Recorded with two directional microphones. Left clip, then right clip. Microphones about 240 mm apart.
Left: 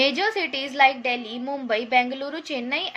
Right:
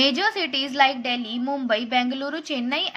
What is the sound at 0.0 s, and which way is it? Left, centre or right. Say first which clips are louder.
A woman's voice: right 1 dB; centre.